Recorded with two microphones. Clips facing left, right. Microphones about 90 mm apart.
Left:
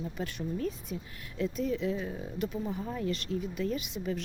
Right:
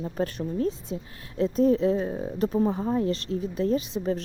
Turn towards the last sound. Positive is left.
turn(degrees=-35)  # may be behind; listen again after turning